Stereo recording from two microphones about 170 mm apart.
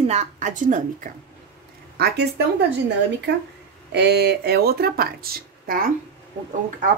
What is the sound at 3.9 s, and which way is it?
Speech, 80° right.